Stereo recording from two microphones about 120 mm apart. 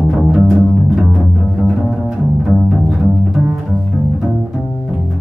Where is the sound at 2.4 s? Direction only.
Centre (ahead or behind).